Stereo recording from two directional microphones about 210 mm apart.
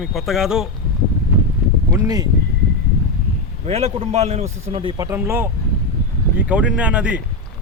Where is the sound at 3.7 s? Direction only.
30° right (ahead or behind); by 5.4 s 10° right (ahead or behind).